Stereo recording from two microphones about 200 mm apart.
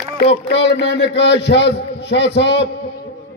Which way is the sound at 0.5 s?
65° left (ahead or behind).